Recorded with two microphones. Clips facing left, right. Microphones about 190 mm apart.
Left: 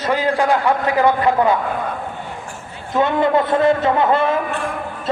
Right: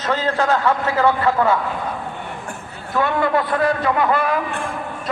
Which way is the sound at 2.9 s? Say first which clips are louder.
Left 3 dB; 20° left (ahead or behind).